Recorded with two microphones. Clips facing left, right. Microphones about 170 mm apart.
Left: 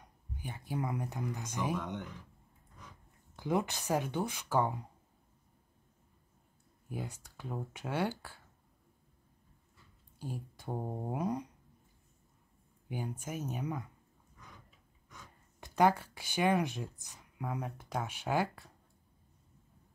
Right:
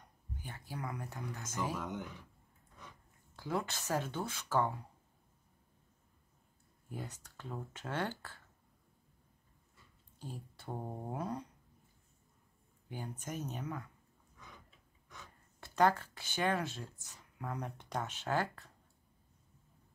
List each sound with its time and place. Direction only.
0.4 s speech: 15° left (ahead or behind)
1.8 s speech: 5° right (ahead or behind)
3.3 s speech: 15° left (ahead or behind)
6.9 s speech: 10° left (ahead or behind)
10.1 s speech: 10° left (ahead or behind)
12.8 s speech: 15° left (ahead or behind)
15.6 s speech: 10° left (ahead or behind)